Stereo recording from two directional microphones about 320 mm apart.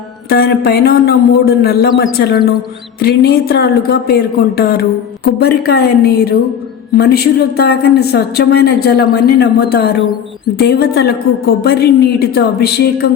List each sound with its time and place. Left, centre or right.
0.3 s speech: left